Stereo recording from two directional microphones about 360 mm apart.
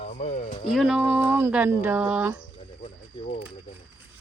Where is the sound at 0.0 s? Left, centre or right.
Centre.